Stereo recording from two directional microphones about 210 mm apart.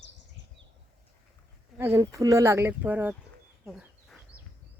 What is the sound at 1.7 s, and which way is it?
Speech, 10° right (ahead or behind).